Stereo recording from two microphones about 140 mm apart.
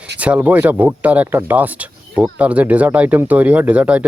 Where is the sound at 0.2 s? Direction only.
10° right (ahead or behind).